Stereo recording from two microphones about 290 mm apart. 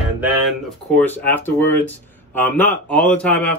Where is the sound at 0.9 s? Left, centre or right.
Centre.